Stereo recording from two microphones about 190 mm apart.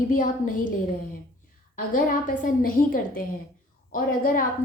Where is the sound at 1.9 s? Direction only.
45° left (ahead or behind).